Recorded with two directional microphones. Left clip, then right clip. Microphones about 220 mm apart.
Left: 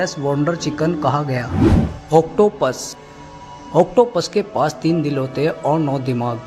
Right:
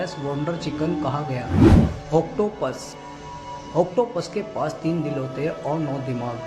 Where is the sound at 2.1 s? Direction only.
45° left (ahead or behind).